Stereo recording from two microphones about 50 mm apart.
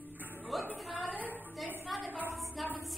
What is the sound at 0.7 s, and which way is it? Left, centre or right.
Speech, centre.